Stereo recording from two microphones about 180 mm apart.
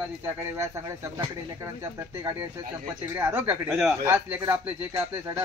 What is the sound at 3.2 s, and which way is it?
Speech, 10° right (ahead or behind).